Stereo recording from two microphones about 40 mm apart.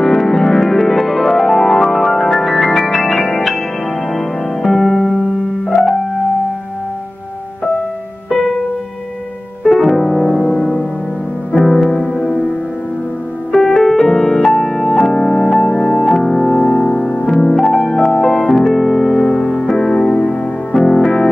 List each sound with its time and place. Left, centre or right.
0.0 s music: centre
4.7 s music: centre
9.6 s music: centre
10.3 s music: left
11.5 s music: centre
13.5 s music: centre
20.0 s music: left
20.7 s music: centre